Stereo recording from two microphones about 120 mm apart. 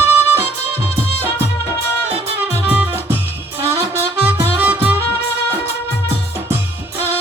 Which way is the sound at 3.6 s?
20° right (ahead or behind).